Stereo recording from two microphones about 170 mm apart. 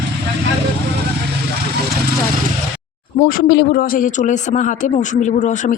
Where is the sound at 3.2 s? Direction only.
60° left (ahead or behind).